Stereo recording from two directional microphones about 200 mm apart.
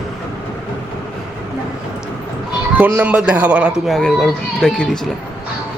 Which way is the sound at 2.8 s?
10° right (ahead or behind).